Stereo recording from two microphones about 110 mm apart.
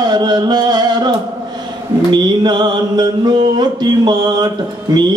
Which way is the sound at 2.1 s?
40° right (ahead or behind).